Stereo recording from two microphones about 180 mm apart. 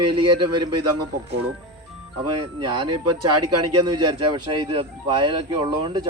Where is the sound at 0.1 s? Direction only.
25° right (ahead or behind).